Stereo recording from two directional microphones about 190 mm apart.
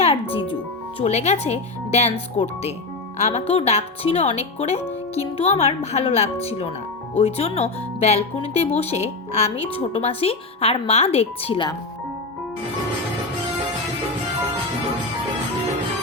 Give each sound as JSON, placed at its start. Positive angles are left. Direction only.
{"t": 0.0, "sound": "music", "side_deg": 30}
{"t": 0.9, "sound": "speech", "side_deg": 35}
{"t": 3.2, "sound": "speech", "side_deg": 35}